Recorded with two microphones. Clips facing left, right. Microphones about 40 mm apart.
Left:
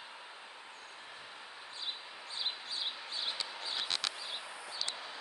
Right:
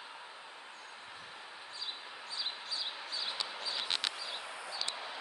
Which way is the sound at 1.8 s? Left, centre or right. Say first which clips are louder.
Left 1 dB; left.